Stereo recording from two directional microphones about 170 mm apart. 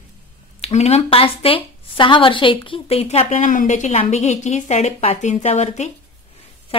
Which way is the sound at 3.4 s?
50° left (ahead or behind).